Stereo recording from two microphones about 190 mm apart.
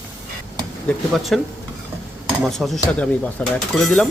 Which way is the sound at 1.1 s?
Centre (ahead or behind).